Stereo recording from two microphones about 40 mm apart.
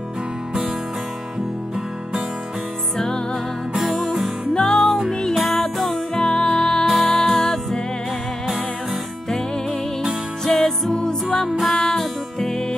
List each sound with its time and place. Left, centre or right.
4.6 s music: centre
5.3 s music: centre
6.1 s music: left
10.4 s music: centre